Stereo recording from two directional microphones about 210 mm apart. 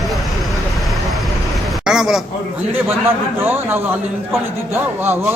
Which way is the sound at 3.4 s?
10° right (ahead or behind).